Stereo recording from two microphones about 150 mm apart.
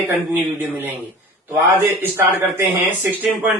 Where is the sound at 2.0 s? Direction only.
15° right (ahead or behind).